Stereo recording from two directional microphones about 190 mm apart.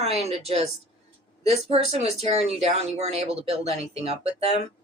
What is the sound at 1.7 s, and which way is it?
Speech, 35° right (ahead or behind).